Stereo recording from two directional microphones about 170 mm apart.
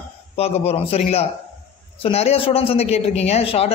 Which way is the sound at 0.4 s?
35° left (ahead or behind).